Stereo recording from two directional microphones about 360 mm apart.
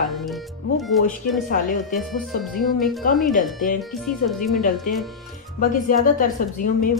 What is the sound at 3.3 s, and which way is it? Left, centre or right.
Speech, left.